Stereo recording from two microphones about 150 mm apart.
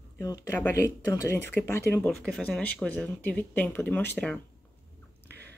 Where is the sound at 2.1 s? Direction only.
Centre (ahead or behind).